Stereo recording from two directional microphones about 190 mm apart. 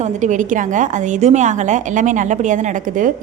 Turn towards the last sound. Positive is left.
turn(degrees=-45)  # may be behind; listen again after turning